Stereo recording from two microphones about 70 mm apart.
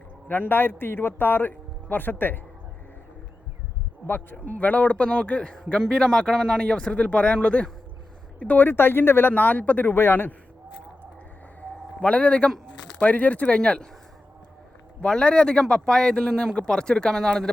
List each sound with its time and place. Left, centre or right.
0.3 s a man's voice: left
4.0 s a man's voice: left
11.9 s a man's voice: centre
15.0 s a man's voice: centre